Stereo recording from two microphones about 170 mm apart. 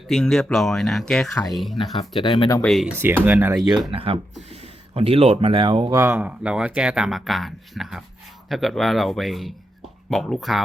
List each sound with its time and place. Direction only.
0.1 s speech: 5° left (ahead or behind)
2.0 s speech: 25° left (ahead or behind)
2.6 s speech: centre (ahead or behind)
3.2 s speech: 10° right (ahead or behind)
3.9 s speech: 35° right (ahead or behind)
5.9 s speech: 15° right (ahead or behind)